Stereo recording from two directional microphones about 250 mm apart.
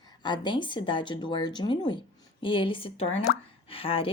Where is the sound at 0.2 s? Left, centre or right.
Centre.